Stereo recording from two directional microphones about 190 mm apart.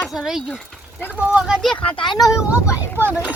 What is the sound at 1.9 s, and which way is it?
A child's voice, 25° left (ahead or behind).